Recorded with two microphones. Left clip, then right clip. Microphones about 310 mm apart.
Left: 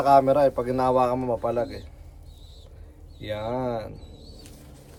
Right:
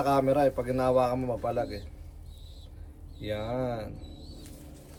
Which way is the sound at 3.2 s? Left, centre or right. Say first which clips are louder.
Left 3 dB; centre.